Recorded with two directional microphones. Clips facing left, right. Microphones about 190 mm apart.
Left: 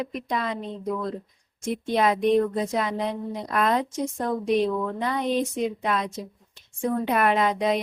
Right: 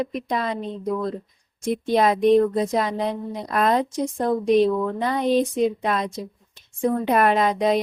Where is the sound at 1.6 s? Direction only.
35° right (ahead or behind).